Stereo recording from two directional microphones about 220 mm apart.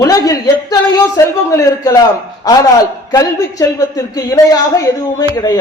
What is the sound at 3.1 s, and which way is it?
Speech, 15° left (ahead or behind).